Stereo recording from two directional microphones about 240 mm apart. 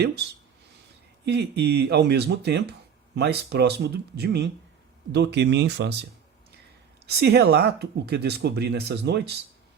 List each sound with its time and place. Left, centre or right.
0.0 s speech: right
7.1 s speech: right